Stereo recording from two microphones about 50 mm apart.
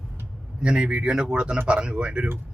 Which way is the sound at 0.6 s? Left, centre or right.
Centre.